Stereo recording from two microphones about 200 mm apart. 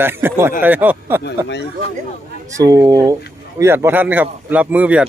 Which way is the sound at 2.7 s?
15° right (ahead or behind).